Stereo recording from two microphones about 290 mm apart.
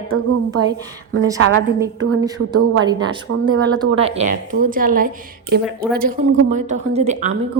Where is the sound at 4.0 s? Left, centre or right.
Right.